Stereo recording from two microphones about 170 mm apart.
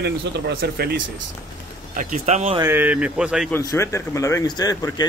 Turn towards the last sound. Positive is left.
turn(degrees=20)  # may be behind; listen again after turning